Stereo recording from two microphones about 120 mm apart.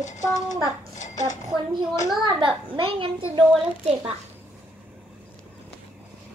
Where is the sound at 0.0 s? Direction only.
90° left.